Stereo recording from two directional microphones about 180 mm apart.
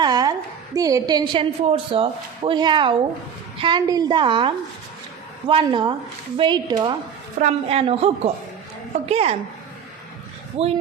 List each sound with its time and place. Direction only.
0.0 s a woman's voice: 20° right (ahead or behind)
10.6 s speech: 35° right (ahead or behind)